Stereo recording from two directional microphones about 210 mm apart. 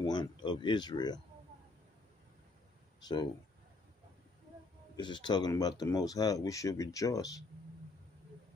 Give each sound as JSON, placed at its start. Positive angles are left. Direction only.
{"t": 0.0, "sound": "speech", "side_deg": 20}
{"t": 4.9, "sound": "speech", "side_deg": 20}